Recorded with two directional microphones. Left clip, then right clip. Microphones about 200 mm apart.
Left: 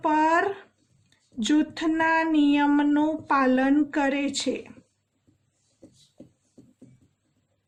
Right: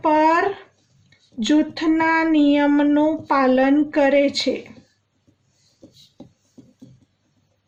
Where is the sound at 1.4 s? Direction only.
45° left (ahead or behind).